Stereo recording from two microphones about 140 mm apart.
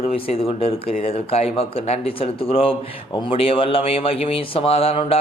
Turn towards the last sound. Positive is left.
turn(degrees=45)  # may be behind; listen again after turning